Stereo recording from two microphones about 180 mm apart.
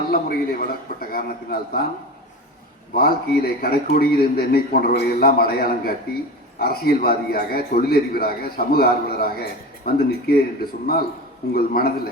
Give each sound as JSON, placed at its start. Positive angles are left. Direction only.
{"t": 0.1, "sound": "a man's voice", "side_deg": 55}
{"t": 2.9, "sound": "a man's voice", "side_deg": 55}